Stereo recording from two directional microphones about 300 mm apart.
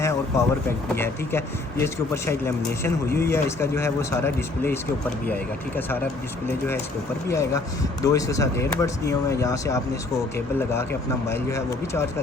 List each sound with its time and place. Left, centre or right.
0.3 s speech: centre
7.3 s speech: centre
11.3 s speech: centre